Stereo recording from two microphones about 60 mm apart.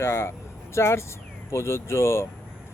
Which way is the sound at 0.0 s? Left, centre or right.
Left.